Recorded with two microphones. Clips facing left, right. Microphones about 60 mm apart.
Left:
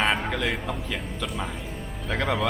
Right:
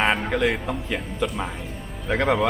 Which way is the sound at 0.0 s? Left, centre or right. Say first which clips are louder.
Right 4 dB; centre.